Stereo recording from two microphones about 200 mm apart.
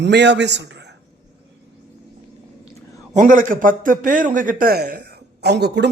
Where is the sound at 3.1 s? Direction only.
40° right (ahead or behind).